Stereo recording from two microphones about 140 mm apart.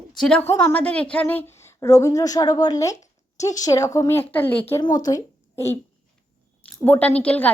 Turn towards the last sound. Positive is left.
turn(degrees=10)  # may be behind; listen again after turning